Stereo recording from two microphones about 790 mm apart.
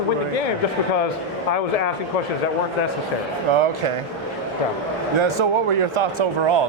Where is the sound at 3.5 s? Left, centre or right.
Right.